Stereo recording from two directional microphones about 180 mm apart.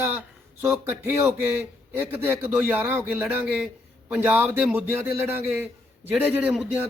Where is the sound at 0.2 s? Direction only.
15° right (ahead or behind).